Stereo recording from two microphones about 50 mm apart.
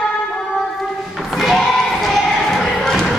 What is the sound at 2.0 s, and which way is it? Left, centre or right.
Basketball bounce, centre.